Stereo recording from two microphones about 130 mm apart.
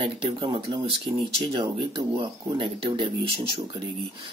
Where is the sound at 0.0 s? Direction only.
40° right (ahead or behind).